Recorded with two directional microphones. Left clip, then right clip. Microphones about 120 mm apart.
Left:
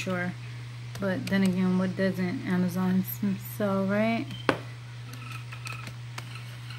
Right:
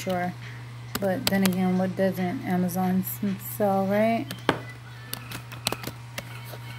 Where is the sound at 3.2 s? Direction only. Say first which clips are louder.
Right 6 dB; 25° left (ahead or behind).